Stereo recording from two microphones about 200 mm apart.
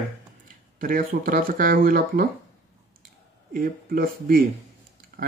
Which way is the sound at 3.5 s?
45° right (ahead or behind).